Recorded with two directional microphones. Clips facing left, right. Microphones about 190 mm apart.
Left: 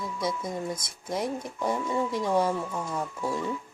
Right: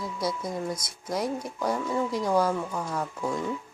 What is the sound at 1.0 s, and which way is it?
Speech, centre (ahead or behind).